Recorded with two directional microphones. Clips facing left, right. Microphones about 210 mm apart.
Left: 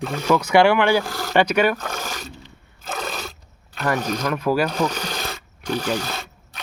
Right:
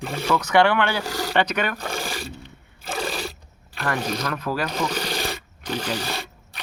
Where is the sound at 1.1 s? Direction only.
10° right (ahead or behind).